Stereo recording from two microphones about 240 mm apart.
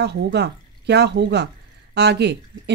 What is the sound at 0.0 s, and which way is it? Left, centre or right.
Speech, right.